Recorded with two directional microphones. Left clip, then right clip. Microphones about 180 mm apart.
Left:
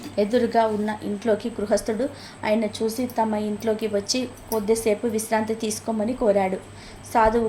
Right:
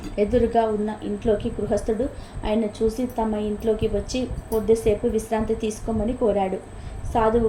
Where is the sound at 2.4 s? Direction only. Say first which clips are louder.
Even; 20° left (ahead or behind).